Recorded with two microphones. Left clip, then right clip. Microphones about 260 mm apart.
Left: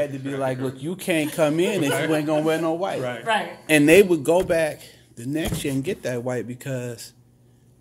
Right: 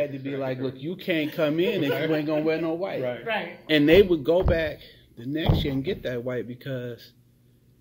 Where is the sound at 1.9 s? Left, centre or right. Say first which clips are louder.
Left 3 dB; left.